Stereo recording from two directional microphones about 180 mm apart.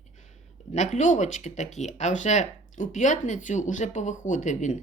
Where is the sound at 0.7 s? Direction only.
40° left (ahead or behind).